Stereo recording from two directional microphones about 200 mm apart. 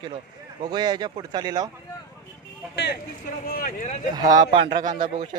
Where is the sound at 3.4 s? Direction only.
45° left (ahead or behind).